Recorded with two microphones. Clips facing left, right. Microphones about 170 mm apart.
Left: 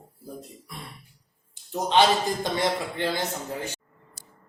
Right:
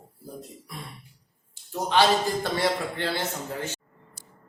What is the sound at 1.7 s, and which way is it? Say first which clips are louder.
A man's voice: left 1 dB; 20° left (ahead or behind).